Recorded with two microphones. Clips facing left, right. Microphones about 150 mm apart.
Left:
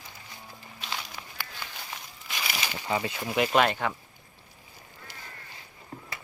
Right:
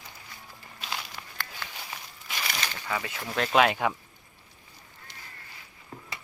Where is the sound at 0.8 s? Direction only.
Centre (ahead or behind).